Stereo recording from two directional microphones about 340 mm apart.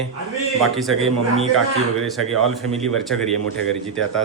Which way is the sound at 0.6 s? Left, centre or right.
Centre.